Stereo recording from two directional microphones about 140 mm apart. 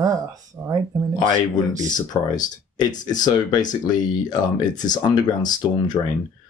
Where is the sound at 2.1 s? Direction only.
25° left (ahead or behind).